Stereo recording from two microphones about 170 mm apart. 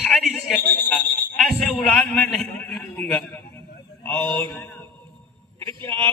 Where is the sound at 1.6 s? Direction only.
Centre (ahead or behind).